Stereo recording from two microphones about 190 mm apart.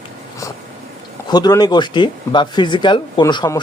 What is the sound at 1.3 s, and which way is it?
Speech, 20° left (ahead or behind).